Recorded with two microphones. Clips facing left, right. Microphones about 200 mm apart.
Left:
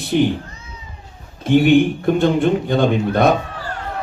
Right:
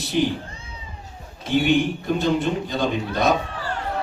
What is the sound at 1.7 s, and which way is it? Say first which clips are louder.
Speech: left 7 dB; 55° left (ahead or behind).